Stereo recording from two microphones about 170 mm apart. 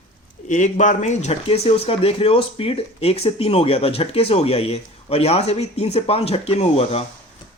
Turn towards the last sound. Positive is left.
turn(degrees=35)  # may be behind; listen again after turning